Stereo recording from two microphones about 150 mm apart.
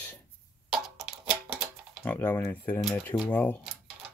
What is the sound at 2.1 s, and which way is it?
Speech, 15° left (ahead or behind).